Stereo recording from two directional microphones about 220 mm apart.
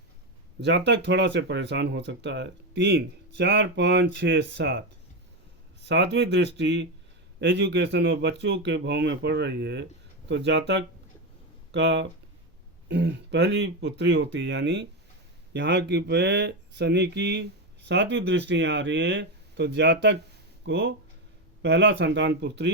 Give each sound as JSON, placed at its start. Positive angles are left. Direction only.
{"t": 0.6, "sound": "speech", "side_deg": -50}
{"t": 5.8, "sound": "speech", "side_deg": -50}